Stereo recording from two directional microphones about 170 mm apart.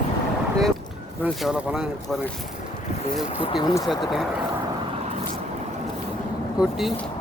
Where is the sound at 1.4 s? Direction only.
5° right (ahead or behind).